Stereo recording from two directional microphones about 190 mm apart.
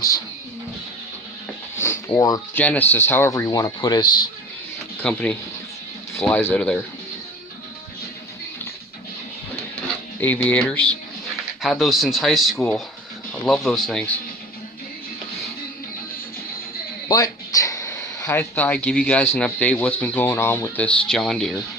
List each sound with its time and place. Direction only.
1.8 s speech: 15° left (ahead or behind)
4.9 s speech: 10° left (ahead or behind)
10.2 s speech: 10° left (ahead or behind)
17.1 s a sound: 20° left (ahead or behind)
18.3 s speech: 10° left (ahead or behind)